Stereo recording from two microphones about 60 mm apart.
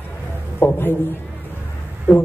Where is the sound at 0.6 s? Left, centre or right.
Left.